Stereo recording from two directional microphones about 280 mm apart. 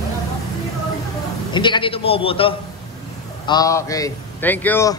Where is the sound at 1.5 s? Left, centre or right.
Centre.